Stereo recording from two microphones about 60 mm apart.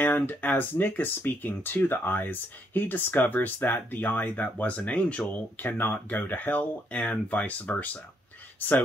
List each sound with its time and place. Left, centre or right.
0.0 s speech: left
5.6 s speech: left